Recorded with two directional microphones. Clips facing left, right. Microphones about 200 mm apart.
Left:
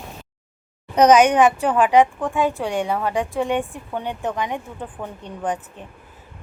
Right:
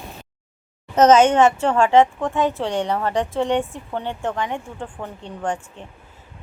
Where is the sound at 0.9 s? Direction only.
15° left (ahead or behind).